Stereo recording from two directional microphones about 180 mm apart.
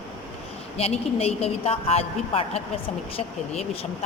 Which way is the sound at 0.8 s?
35° left (ahead or behind).